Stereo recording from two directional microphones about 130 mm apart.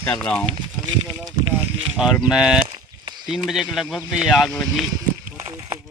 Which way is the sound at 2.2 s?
5° right (ahead or behind).